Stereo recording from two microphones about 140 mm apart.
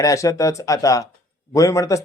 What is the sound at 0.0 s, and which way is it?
Speech, 25° left (ahead or behind).